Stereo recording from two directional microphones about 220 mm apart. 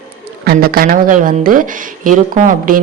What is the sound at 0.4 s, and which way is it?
Speech, 45° right (ahead or behind).